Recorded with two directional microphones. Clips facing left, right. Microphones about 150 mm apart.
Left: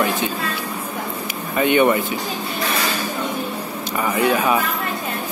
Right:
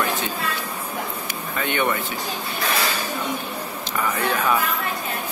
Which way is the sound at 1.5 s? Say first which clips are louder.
Left 8 dB; 15° left (ahead or behind).